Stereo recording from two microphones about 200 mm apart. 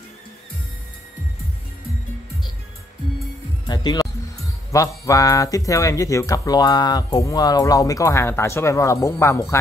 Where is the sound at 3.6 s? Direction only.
20° left (ahead or behind).